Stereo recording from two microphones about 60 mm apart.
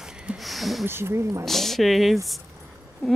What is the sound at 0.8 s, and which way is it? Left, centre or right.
Speech, right.